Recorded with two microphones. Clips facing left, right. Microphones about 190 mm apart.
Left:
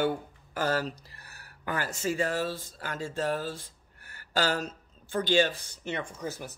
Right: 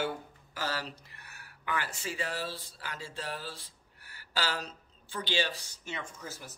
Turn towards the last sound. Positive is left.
turn(degrees=60)  # may be behind; listen again after turning